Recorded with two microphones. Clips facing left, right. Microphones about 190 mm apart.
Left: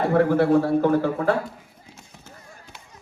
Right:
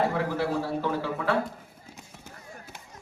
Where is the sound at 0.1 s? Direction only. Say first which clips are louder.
Left 10 dB; 55° left (ahead or behind).